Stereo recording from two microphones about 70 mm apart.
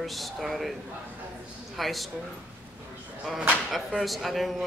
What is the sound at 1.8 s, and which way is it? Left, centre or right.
Speech, centre.